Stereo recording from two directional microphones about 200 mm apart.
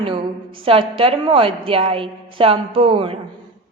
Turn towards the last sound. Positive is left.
turn(degrees=-25)  # may be behind; listen again after turning